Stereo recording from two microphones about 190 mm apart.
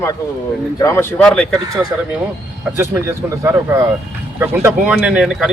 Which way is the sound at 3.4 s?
15° right (ahead or behind).